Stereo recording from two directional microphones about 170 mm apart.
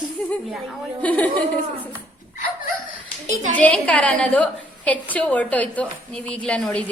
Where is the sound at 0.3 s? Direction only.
5° left (ahead or behind).